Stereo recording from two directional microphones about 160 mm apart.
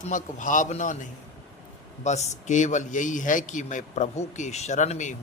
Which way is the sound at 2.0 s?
45° left (ahead or behind).